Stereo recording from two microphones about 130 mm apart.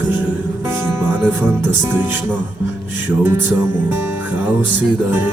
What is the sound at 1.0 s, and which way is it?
Music, 15° right (ahead or behind).